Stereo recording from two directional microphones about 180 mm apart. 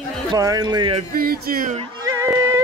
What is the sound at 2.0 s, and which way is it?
Music, 15° right (ahead or behind).